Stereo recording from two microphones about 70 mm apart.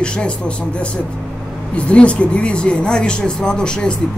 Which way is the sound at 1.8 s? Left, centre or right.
Centre.